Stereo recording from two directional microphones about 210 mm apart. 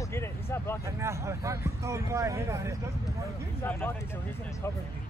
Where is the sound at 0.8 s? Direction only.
15° right (ahead or behind).